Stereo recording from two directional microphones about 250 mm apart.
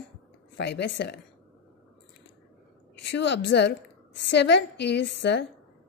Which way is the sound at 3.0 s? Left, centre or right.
Left.